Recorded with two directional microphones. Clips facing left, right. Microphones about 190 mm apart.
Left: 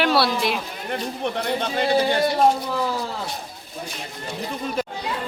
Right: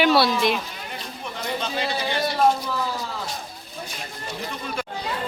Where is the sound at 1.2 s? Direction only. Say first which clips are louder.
Left 3 dB; 60° left (ahead or behind).